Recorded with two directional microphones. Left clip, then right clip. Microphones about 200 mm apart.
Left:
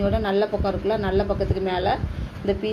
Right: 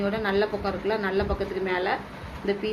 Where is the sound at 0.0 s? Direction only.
50° left (ahead or behind).